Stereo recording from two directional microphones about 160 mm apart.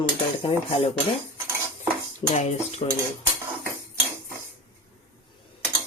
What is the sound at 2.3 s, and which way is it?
Speech, 45° left (ahead or behind).